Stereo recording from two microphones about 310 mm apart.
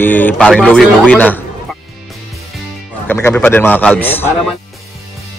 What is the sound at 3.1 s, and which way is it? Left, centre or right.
A man's voice, centre.